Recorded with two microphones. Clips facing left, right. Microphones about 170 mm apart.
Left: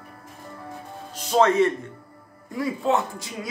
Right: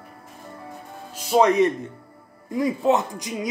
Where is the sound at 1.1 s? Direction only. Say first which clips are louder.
Right 1 dB; 10° right (ahead or behind).